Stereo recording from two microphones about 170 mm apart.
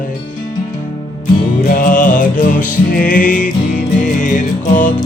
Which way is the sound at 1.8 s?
50° left (ahead or behind).